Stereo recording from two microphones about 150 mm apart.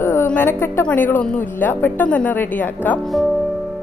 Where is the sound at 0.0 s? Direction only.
15° left (ahead or behind).